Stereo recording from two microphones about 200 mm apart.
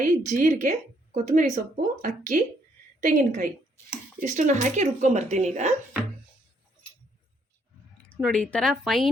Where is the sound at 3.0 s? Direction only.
40° right (ahead or behind).